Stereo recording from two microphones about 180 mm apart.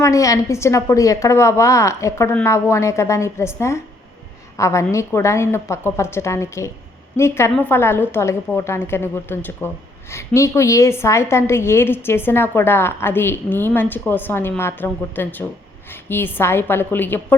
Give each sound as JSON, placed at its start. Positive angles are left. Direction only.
{"t": 0.0, "sound": "a woman's voice", "side_deg": 15}